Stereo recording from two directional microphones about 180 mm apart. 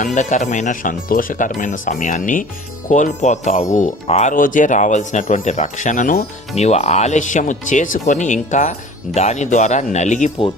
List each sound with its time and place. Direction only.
0.0 s speech: 45° left (ahead or behind)